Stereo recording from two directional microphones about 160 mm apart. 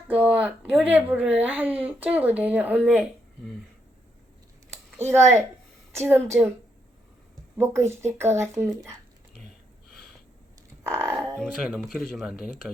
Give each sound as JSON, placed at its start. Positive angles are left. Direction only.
{"t": 0.1, "sound": "speech", "side_deg": -10}
{"t": 4.9, "sound": "speech", "side_deg": -15}
{"t": 7.5, "sound": "speech", "side_deg": -15}
{"t": 10.8, "sound": "a sound", "side_deg": -15}
{"t": 11.3, "sound": "speech", "side_deg": 5}